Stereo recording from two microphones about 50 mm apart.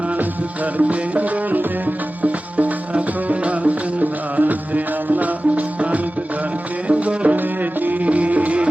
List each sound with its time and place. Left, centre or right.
0.2 s music: right
7.3 s music: right